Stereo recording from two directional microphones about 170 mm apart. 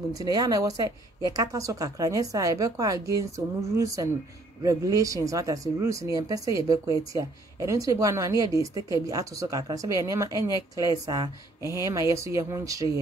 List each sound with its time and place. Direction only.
0.1 s speech: 20° right (ahead or behind)